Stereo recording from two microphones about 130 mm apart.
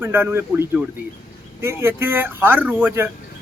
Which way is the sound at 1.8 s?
15° right (ahead or behind).